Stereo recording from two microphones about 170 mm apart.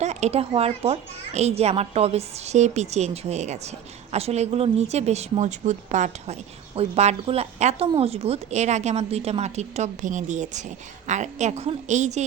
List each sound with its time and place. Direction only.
0.0 s speech: 40° right (ahead or behind)